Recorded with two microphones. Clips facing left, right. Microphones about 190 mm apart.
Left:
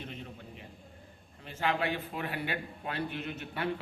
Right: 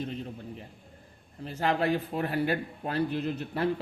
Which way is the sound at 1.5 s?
40° right (ahead or behind).